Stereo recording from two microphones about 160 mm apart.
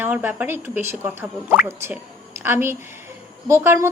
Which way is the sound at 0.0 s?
10° right (ahead or behind).